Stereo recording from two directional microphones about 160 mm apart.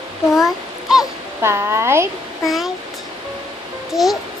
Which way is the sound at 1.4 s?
15° right (ahead or behind).